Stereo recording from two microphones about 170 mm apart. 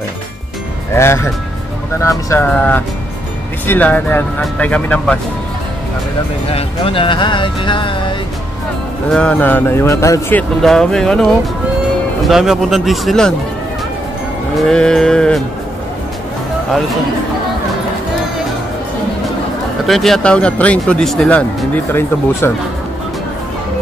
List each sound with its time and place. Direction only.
0.9 s speech: 15° left (ahead or behind)
6.5 s speech: 35° left (ahead or behind)
9.1 s speech: 10° left (ahead or behind)
10.6 s speech: 5° left (ahead or behind)
12.3 s speech: centre (ahead or behind)
14.7 s speech: 5° left (ahead or behind)
19.9 s speech: centre (ahead or behind)